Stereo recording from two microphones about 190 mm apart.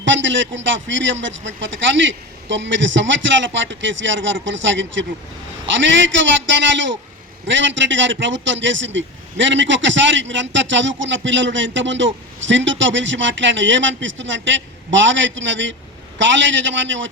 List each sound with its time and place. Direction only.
0.0 s a man's voice: 75° right (ahead or behind)